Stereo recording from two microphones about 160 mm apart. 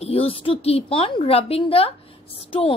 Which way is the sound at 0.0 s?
35° left (ahead or behind).